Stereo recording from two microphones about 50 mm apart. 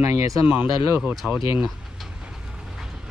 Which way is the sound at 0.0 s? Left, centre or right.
Right.